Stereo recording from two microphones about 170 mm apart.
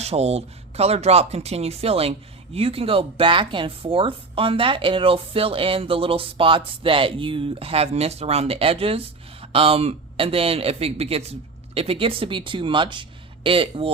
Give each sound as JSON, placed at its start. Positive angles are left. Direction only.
{"t": 0.0, "sound": "speech", "side_deg": -40}